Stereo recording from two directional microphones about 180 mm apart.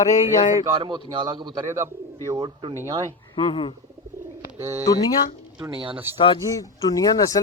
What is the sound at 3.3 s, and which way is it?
Speech, 30° left (ahead or behind).